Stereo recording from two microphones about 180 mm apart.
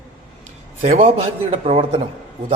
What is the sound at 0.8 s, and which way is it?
A man's voice, 40° right (ahead or behind).